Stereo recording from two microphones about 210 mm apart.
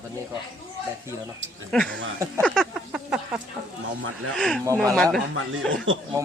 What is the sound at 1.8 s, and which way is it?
Speech, 60° right (ahead or behind).